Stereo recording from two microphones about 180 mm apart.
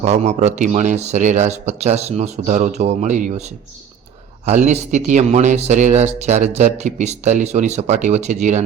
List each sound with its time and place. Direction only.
0.0 s speech: 40° right (ahead or behind)
4.4 s speech: 40° right (ahead or behind)